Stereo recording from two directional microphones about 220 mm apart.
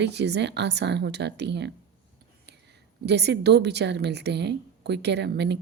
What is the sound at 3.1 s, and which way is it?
Speech, 50° right (ahead or behind).